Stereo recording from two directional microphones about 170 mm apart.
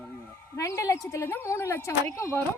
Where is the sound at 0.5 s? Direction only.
15° left (ahead or behind).